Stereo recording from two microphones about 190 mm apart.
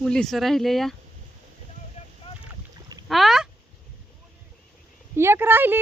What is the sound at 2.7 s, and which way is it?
Boat, 20° right (ahead or behind).